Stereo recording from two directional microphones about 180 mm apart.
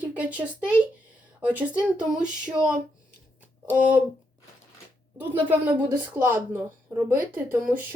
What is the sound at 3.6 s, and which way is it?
Speech, 10° right (ahead or behind).